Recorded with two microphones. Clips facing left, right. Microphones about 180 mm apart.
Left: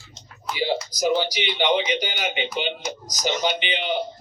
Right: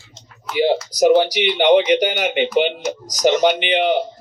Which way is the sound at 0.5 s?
60° right (ahead or behind).